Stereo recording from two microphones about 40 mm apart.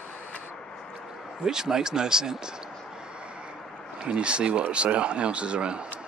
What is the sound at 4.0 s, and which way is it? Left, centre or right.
Speech, right.